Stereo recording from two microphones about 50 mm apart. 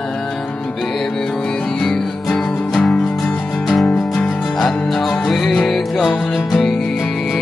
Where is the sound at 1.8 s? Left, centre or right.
Centre.